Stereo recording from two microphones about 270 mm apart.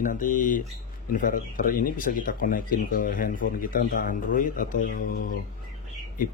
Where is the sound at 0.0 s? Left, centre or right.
Left.